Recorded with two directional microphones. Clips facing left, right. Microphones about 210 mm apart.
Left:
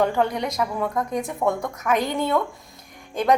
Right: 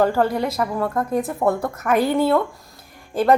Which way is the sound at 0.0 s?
5° right (ahead or behind).